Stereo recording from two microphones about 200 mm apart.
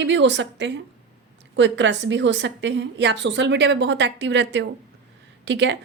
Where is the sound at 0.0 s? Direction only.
65° right (ahead or behind).